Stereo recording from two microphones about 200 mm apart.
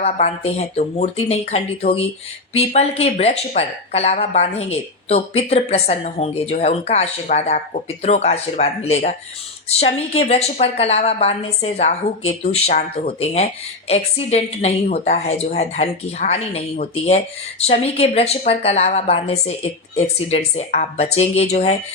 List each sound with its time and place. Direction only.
0.0 s a woman's voice: 30° left (ahead or behind)